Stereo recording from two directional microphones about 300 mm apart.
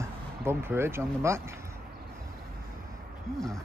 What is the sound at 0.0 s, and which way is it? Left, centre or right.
Speech, centre.